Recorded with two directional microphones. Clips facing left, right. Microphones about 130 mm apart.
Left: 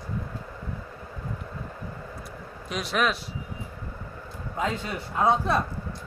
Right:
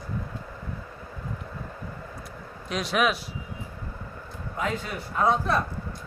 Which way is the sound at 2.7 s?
Centre (ahead or behind).